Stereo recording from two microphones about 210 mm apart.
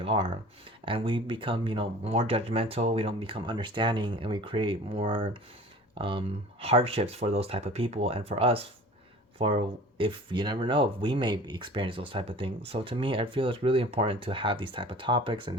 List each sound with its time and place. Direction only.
0.0 s speech: 25° right (ahead or behind)